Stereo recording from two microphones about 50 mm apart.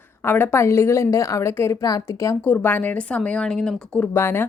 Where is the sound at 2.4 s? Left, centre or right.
Left; by 4.0 s centre.